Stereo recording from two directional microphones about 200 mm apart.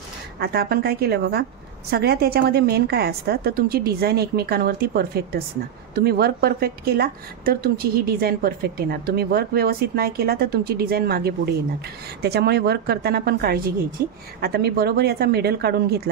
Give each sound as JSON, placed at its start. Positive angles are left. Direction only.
{"t": 0.4, "sound": "a woman's voice", "side_deg": -50}